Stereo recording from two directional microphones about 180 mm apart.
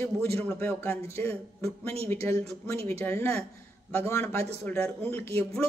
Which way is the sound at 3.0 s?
10° left (ahead or behind).